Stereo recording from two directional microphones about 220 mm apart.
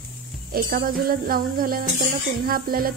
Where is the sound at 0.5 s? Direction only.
40° right (ahead or behind).